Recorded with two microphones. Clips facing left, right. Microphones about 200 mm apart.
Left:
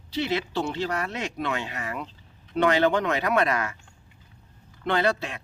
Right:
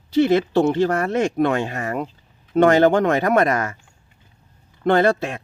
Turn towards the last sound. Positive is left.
turn(degrees=-50)  # may be behind; listen again after turning